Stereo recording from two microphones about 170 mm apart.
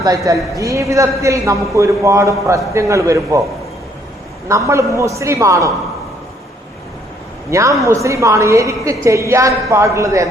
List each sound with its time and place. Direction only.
0.5 s a woman's voice: 20° right (ahead or behind)
4.4 s a woman's voice: 15° right (ahead or behind)
7.5 s a woman's voice: 20° right (ahead or behind)